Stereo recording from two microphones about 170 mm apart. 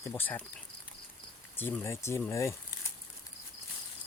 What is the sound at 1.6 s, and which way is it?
Speech, 15° left (ahead or behind).